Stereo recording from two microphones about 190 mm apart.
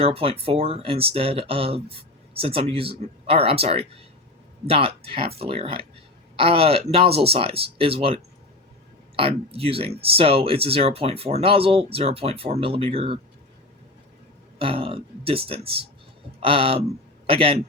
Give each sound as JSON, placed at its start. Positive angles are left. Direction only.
{"t": 0.0, "sound": "speech", "side_deg": -30}
{"t": 14.6, "sound": "speech", "side_deg": -30}